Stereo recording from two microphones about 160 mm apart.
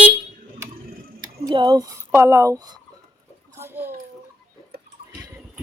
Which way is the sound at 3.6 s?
15° right (ahead or behind).